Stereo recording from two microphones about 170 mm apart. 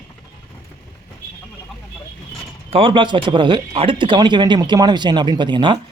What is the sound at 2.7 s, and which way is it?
Speech, 30° right (ahead or behind).